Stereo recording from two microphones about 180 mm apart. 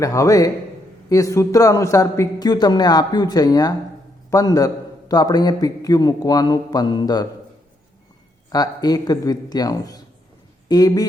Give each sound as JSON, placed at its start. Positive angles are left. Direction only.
{"t": 0.0, "sound": "a man's voice", "side_deg": 20}
{"t": 8.4, "sound": "a man's voice", "side_deg": 20}